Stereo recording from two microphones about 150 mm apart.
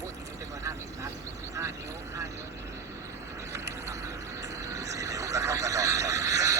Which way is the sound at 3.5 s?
20° right (ahead or behind).